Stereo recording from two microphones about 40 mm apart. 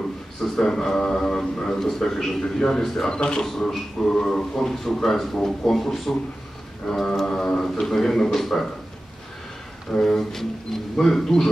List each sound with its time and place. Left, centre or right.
0.4 s a sound: centre
1.9 s a man's voice: centre
3.1 s speech: left
3.4 s a man's voice: centre
7.2 s a sound: left
7.8 s a man's voice: centre
10.0 s a man's voice: centre